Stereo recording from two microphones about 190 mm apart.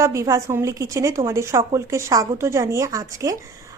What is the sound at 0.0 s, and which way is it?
A woman's voice, 15° right (ahead or behind).